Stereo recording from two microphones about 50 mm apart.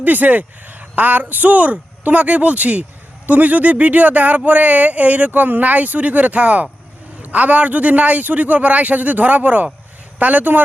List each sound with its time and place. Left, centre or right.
0.0 s speech: right